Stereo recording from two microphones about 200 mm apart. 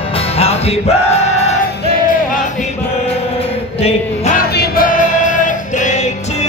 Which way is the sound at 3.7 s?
30° left (ahead or behind).